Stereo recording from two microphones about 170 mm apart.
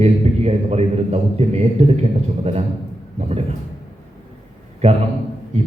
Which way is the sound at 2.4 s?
35° right (ahead or behind).